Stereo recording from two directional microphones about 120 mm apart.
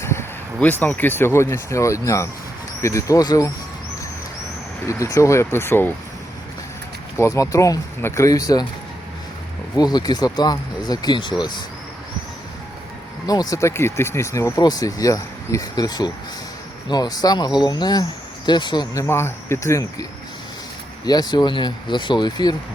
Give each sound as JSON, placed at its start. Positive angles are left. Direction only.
{"t": 0.0, "sound": "speech", "side_deg": 20}
{"t": 5.1, "sound": "speech", "side_deg": 25}
{"t": 7.2, "sound": "speech", "side_deg": 25}
{"t": 9.7, "sound": "speech", "side_deg": 35}
{"t": 13.2, "sound": "speech", "side_deg": 30}
{"t": 19.0, "sound": "speech", "side_deg": 20}